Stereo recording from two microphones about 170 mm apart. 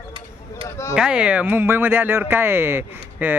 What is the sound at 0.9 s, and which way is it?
Speech, 5° right (ahead or behind).